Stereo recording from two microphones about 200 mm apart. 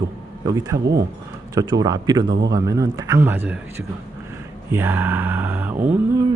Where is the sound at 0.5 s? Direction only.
15° right (ahead or behind).